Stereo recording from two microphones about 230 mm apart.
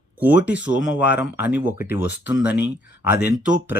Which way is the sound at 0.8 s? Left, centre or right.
Left.